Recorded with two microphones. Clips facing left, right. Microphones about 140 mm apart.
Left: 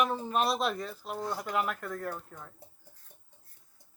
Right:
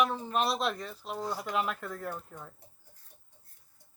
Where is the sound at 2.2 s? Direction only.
10° right (ahead or behind).